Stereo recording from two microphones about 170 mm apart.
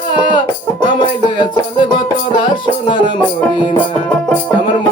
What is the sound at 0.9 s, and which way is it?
Music, 25° left (ahead or behind).